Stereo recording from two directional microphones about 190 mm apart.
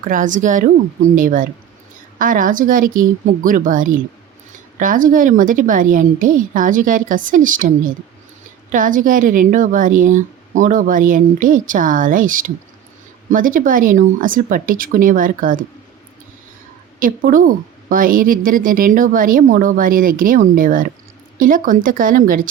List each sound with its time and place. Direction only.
0.0 s a woman's voice: 45° right (ahead or behind)
17.0 s a woman's voice: 45° right (ahead or behind)